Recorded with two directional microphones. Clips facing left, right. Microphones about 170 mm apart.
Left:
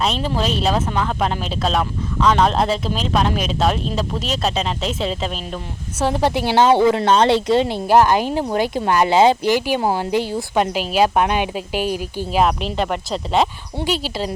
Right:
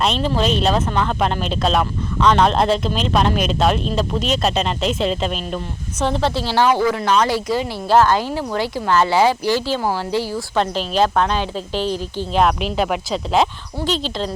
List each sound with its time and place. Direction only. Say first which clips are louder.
0.0 s speech: right 2 dB; 5° left (ahead or behind); by 7.8 s 25° left (ahead or behind)
7.9 s speech: right 1 dB; 15° left (ahead or behind)